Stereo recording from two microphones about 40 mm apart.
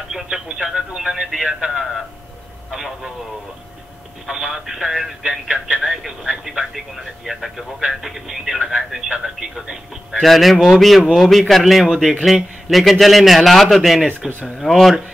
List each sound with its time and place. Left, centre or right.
0.3 s speech: centre
4.3 s speech: centre
5.2 s speech: centre
10.2 s speech: centre